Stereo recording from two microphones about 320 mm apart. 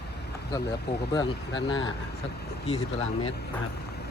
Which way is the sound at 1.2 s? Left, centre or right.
Centre.